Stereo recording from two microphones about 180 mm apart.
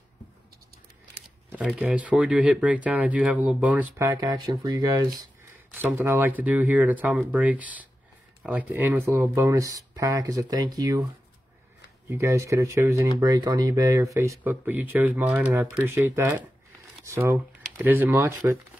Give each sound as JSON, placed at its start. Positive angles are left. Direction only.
{"t": 1.5, "sound": "speech", "side_deg": -5}
{"t": 12.1, "sound": "speech", "side_deg": -15}